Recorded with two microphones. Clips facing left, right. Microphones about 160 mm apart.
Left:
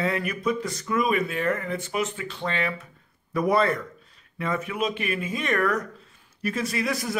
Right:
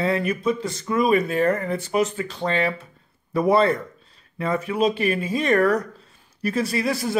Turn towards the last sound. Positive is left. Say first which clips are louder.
# right 4 dB
turn(degrees=-30)  # may be behind; listen again after turning